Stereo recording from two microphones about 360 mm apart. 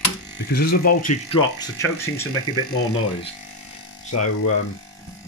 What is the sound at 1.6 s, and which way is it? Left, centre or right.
Speech, centre.